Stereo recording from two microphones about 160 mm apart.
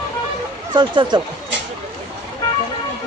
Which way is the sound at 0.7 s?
30° right (ahead or behind).